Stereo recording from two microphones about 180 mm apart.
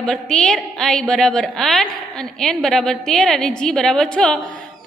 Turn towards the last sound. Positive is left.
turn(degrees=5)  # may be behind; listen again after turning